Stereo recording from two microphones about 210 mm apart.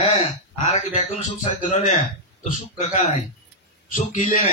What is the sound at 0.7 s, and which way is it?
A man's voice, 35° left (ahead or behind).